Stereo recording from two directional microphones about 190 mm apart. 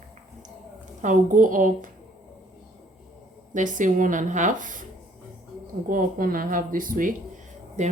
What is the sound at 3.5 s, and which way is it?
Speech, 40° right (ahead or behind).